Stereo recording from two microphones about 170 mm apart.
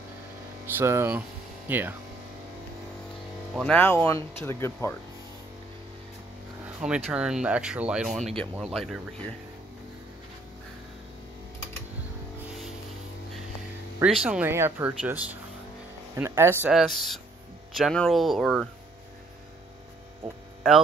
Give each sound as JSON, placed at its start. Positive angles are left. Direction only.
{"t": 0.7, "sound": "speech", "side_deg": -15}
{"t": 3.5, "sound": "speech", "side_deg": 5}
{"t": 6.6, "sound": "vehicle", "side_deg": -5}
{"t": 7.1, "sound": "speech", "side_deg": -5}
{"t": 14.0, "sound": "speech", "side_deg": -5}
{"t": 16.7, "sound": "speech", "side_deg": 0}